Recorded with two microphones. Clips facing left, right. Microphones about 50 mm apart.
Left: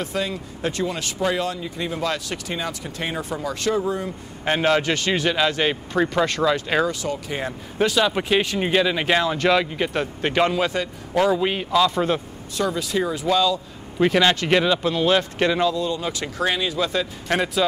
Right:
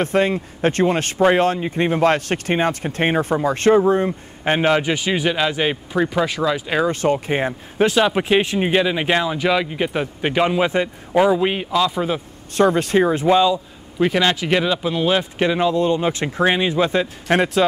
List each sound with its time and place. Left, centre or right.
0.0 s speech: right
4.5 s speech: centre
6.9 s speech: right; by 11.6 s centre
11.7 s a man's voice: centre
12.5 s speech: right
13.9 s speech: centre
15.7 s speech: right